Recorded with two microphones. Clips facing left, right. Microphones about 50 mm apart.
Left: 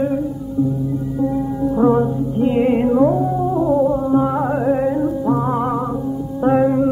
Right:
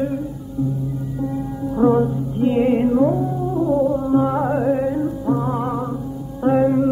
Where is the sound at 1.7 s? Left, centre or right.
Centre.